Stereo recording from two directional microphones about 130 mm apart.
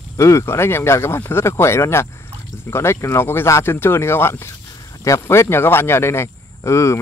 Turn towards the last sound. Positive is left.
turn(degrees=20)  # may be behind; listen again after turning